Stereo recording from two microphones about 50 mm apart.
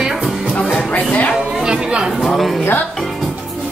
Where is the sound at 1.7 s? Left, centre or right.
Centre.